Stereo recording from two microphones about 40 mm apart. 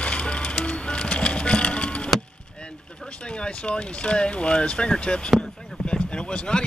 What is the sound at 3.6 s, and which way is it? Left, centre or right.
Speech, left.